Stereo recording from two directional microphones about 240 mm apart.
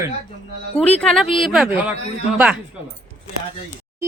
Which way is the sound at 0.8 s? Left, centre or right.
Centre.